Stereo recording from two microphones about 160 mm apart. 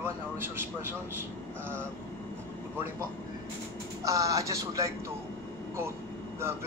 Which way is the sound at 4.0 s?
20° right (ahead or behind).